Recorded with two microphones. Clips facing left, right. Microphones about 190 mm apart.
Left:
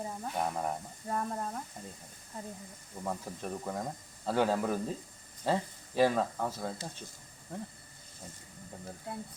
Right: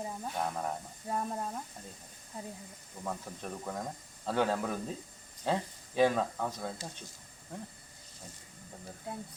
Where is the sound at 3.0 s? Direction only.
5° left (ahead or behind).